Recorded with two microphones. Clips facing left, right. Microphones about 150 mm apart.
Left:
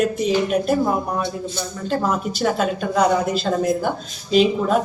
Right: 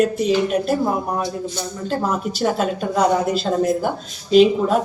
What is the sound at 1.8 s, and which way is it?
A woman's voice, centre (ahead or behind).